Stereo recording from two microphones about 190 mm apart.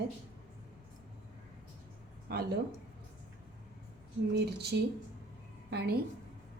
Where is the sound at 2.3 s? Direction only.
55° right (ahead or behind).